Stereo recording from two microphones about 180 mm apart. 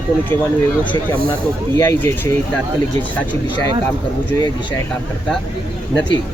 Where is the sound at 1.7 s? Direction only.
15° left (ahead or behind).